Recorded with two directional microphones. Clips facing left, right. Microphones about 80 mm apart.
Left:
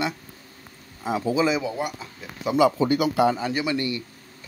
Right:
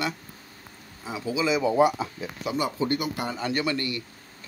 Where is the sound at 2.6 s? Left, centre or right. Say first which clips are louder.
Left 12 dB; left.